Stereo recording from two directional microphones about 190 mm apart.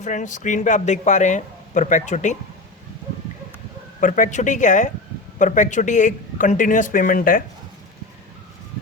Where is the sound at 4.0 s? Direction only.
45° left (ahead or behind).